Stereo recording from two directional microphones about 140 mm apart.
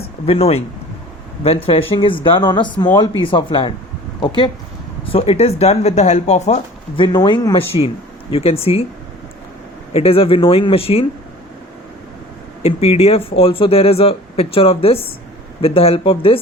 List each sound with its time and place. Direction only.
0.3 s speech: 45° left (ahead or behind)
5.1 s speech: 45° left (ahead or behind)
6.9 s speech: 35° left (ahead or behind)
9.9 s speech: 45° left (ahead or behind)
12.6 s speech: 45° left (ahead or behind)